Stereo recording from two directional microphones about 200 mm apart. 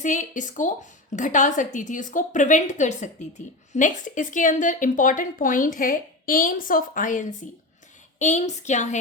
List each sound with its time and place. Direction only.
0.0 s speech: 40° left (ahead or behind)